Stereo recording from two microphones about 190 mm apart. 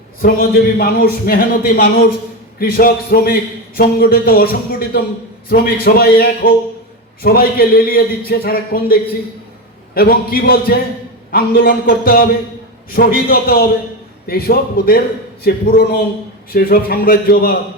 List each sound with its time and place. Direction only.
0.2 s a man's voice: 50° left (ahead or behind)